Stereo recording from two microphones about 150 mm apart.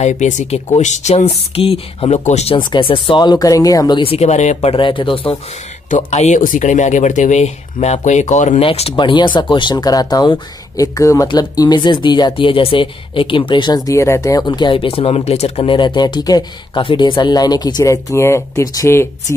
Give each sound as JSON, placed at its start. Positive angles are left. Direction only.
{"t": 0.0, "sound": "speech", "side_deg": 50}
{"t": 4.0, "sound": "speech", "side_deg": 45}
{"t": 5.9, "sound": "speech", "side_deg": 55}
{"t": 8.6, "sound": "speech", "side_deg": 40}